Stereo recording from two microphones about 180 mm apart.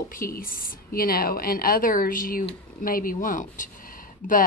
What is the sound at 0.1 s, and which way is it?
A woman's voice, 50° left (ahead or behind).